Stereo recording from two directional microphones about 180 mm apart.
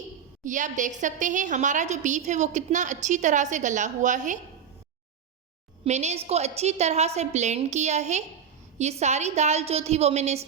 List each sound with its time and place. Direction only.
0.4 s a woman's voice: 45° right (ahead or behind)
5.8 s a woman's voice: 40° right (ahead or behind)